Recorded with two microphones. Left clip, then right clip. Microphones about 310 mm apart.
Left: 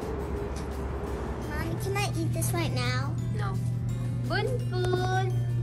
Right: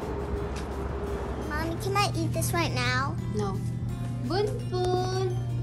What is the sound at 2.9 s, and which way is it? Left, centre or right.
Speech, centre.